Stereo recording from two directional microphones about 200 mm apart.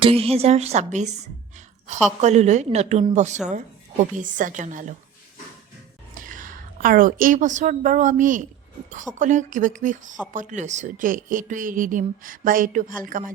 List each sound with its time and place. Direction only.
0.0 s a woman's voice: 30° right (ahead or behind)
6.1 s a woman's voice: 40° right (ahead or behind)